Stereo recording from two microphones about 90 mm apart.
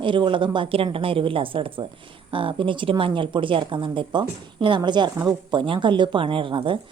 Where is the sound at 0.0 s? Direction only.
65° right (ahead or behind).